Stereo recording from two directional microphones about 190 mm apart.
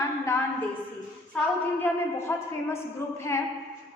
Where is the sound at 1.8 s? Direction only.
15° left (ahead or behind).